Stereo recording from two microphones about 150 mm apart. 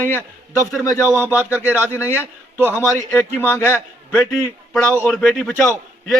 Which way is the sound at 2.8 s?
15° left (ahead or behind).